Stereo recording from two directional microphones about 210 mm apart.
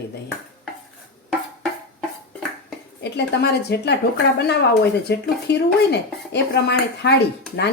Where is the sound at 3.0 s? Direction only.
50° left (ahead or behind).